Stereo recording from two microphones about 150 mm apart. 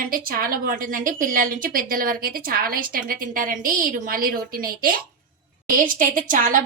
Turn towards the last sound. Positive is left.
turn(degrees=-60)  # may be behind; listen again after turning